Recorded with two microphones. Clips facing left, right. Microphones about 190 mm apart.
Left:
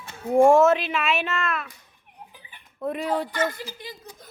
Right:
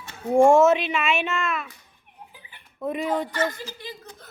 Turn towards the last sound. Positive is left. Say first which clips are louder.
# right 1 dB
turn(degrees=15)  # may be behind; listen again after turning